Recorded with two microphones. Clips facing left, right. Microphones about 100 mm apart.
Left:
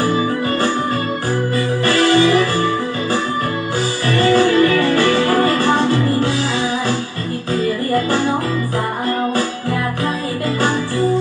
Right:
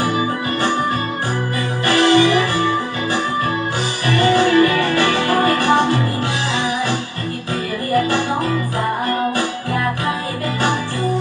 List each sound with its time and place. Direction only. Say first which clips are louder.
0.0 s music: left 2 dB; 20° right (ahead or behind)
1.9 s music: even; 20° right (ahead or behind)
10.6 s music: left 2 dB; 15° right (ahead or behind)